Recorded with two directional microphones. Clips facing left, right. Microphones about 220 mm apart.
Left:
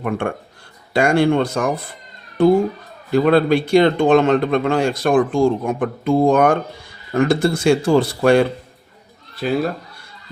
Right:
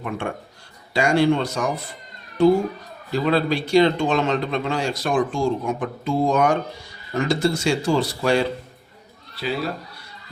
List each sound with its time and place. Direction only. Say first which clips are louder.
0.2 s a man's voice: left 5 dB; 55° left (ahead or behind)